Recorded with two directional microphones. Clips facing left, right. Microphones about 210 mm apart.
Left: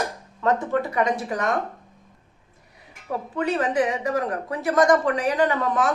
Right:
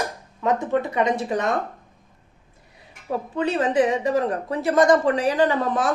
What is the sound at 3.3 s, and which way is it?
Speech, 25° right (ahead or behind).